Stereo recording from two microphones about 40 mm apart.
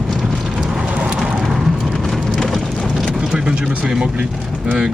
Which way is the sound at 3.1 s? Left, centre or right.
Right.